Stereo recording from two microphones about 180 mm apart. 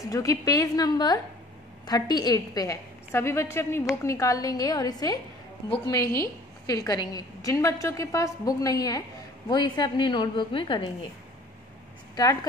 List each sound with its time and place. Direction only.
0.1 s a woman's voice: 20° left (ahead or behind)